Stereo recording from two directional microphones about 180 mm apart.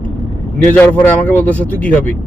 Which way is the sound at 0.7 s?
10° left (ahead or behind).